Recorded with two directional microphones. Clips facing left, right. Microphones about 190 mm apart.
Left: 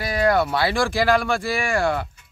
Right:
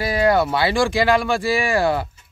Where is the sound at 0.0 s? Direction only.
25° right (ahead or behind).